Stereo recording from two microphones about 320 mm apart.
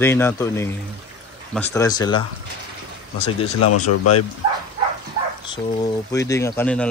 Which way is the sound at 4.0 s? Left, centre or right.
Left.